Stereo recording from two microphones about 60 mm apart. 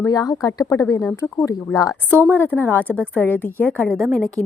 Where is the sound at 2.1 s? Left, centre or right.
Right.